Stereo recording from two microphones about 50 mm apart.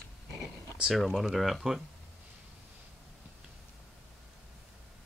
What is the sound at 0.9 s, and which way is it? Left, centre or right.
Speech, centre.